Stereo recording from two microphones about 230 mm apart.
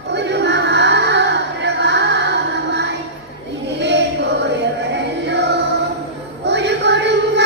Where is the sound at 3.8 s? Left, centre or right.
Right.